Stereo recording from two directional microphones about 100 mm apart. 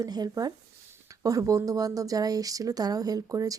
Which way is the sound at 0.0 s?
40° right (ahead or behind).